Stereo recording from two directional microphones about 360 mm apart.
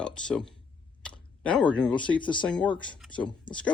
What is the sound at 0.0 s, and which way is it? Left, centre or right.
Speech, centre.